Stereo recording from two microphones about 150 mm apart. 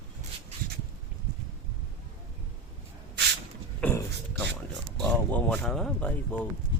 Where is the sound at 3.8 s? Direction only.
10° left (ahead or behind).